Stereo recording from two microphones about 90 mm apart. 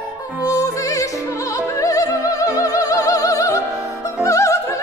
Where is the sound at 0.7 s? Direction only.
35° left (ahead or behind).